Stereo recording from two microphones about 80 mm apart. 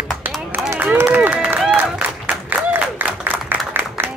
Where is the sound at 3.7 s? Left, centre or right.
Right.